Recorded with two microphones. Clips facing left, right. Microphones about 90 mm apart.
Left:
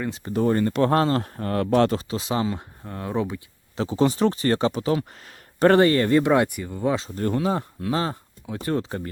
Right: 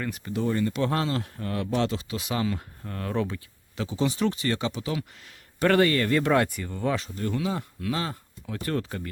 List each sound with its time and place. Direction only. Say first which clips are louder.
0.0 s speech: left 3 dB; 25° left (ahead or behind)
0.3 s speech: left 5 dB; 45° left (ahead or behind)
2.0 s speech: left 3 dB; 30° left (ahead or behind)
3.8 s speech: left 6 dB; 40° left (ahead or behind); by 7.1 s 20° left (ahead or behind)
7.2 s speech: left 5 dB; 40° left (ahead or behind); by 9.0 s 20° left (ahead or behind)